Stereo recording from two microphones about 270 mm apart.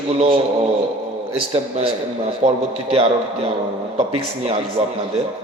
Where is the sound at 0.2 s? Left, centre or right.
Centre.